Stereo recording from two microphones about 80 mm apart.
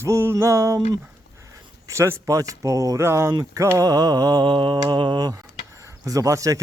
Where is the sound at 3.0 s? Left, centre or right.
Right.